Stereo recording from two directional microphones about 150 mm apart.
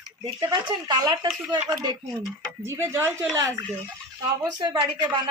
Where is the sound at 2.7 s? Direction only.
15° right (ahead or behind).